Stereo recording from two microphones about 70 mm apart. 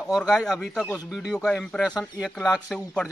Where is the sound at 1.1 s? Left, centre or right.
Centre.